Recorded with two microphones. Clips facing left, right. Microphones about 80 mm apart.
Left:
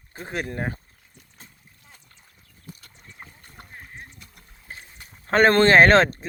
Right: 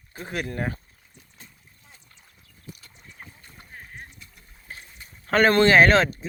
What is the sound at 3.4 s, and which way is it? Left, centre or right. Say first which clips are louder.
Rowboat: left 3 dB; left.